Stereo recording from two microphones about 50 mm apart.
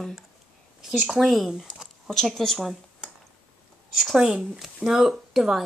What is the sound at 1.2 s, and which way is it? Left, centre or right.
Speech, centre.